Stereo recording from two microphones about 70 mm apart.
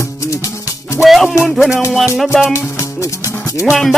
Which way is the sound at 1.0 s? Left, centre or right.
Centre.